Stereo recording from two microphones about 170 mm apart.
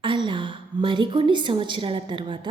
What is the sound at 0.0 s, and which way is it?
A woman's voice, 30° right (ahead or behind).